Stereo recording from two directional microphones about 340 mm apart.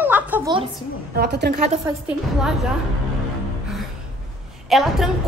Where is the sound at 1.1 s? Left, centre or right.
Right.